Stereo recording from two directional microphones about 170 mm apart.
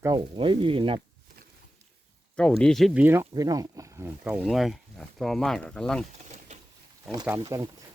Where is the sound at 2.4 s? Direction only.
5° left (ahead or behind); by 4.1 s 20° right (ahead or behind).